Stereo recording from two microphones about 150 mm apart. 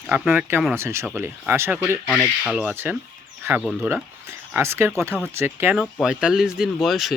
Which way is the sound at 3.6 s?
Centre (ahead or behind).